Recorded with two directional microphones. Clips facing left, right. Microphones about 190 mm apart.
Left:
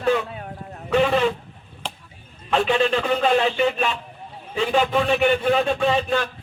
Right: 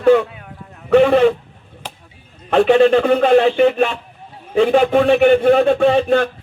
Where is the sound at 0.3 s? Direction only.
40° left (ahead or behind).